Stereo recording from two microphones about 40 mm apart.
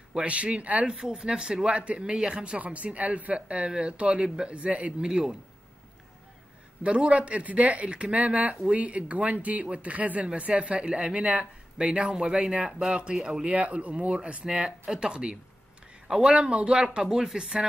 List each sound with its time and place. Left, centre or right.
0.2 s speech: right
0.8 s speech: centre
2.6 s speech: right
5.0 s speech: centre
6.8 s speech: right
13.5 s speech: right
14.5 s speech: right
16.9 s speech: centre